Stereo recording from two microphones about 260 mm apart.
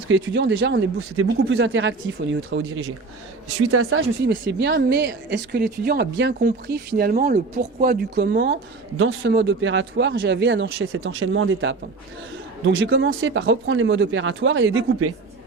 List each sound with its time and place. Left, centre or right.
0.1 s speech: right